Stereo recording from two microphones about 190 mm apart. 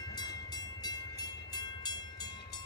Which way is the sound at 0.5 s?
20° left (ahead or behind).